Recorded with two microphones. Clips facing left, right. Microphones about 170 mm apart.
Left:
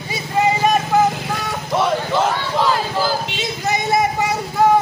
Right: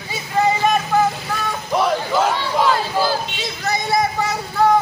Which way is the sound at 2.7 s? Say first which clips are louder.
Even; 10° left (ahead or behind).